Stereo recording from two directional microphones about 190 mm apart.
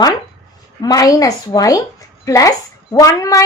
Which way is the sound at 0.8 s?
20° left (ahead or behind).